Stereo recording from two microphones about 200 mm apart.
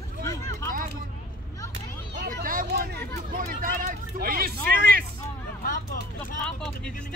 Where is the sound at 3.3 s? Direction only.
40° right (ahead or behind).